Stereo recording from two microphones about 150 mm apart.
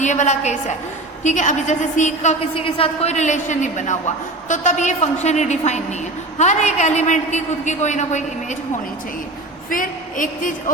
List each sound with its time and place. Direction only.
0.0 s a woman's voice: 55° left (ahead or behind)
2.6 s a woman's voice: 40° left (ahead or behind); by 8.5 s 55° left (ahead or behind)
9.6 s a woman's voice: 65° left (ahead or behind)